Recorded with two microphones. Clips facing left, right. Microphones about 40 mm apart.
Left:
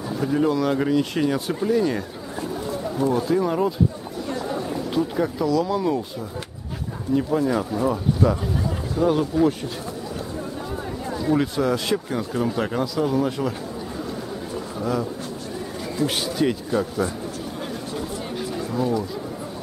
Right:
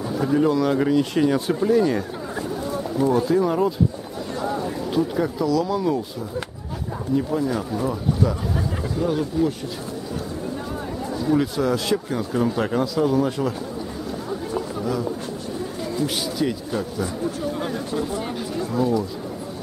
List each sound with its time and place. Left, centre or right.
0.2 s speech: centre
7.2 s speech: centre
11.1 s speech: centre
16.4 s speech: centre
18.4 s a sound: centre